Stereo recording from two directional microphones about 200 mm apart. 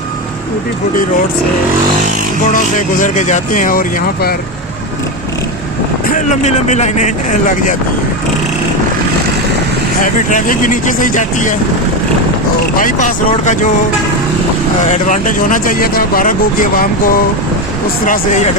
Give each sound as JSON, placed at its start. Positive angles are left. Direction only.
{"t": 2.5, "sound": "speech", "side_deg": 40}
{"t": 6.1, "sound": "speech", "side_deg": 40}
{"t": 10.0, "sound": "speech", "side_deg": 40}
{"t": 12.7, "sound": "speech", "side_deg": 40}
{"t": 14.8, "sound": "speech", "side_deg": 40}